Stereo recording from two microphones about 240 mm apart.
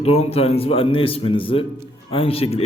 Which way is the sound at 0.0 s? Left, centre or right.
Left.